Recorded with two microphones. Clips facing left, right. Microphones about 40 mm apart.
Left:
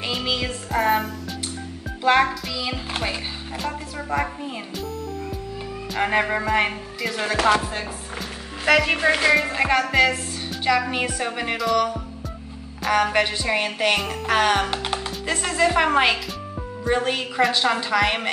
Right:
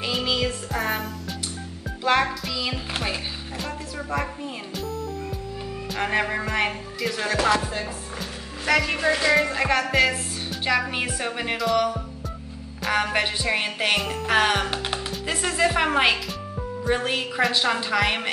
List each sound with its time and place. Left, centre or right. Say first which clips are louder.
0.0 s music: right 1 dB; centre
2.0 s speech: left 3 dB; centre
5.9 s speech: left 3 dB; centre
8.6 s speech: left 3 dB; left
9.3 s speech: left 1 dB; centre